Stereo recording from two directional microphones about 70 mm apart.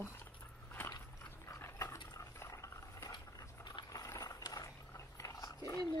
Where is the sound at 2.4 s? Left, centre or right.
Left.